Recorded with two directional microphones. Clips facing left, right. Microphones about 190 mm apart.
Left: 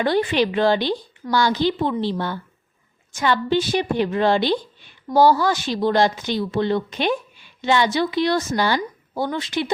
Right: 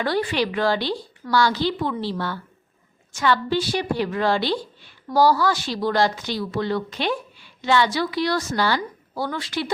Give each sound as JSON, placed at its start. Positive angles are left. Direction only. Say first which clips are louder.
{"t": 0.0, "sound": "a woman's voice", "louder": "left 3 dB", "side_deg": 20}